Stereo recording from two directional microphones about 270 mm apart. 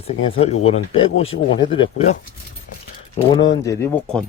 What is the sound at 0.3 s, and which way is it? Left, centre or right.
Speech, left.